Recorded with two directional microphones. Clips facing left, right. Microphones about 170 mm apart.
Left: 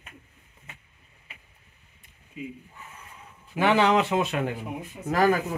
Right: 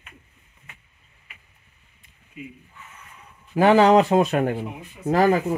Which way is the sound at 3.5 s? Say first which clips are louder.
Right 6 dB; 40° right (ahead or behind).